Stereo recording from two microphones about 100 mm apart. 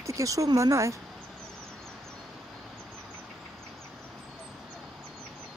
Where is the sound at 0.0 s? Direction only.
30° right (ahead or behind).